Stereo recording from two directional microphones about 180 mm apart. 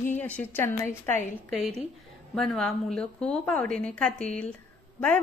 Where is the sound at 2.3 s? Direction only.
Centre (ahead or behind).